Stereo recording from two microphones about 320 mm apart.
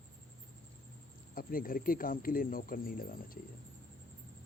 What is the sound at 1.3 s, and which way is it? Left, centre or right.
A man's voice, left.